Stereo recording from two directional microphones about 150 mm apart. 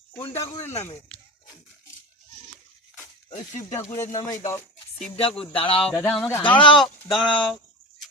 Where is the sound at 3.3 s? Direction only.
50° left (ahead or behind).